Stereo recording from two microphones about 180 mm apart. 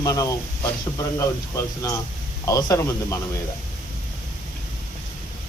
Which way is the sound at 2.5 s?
20° left (ahead or behind).